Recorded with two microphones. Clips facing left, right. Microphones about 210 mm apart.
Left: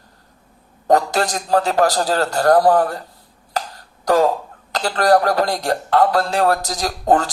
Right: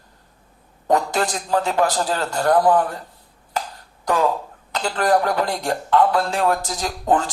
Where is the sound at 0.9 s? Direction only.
40° left (ahead or behind).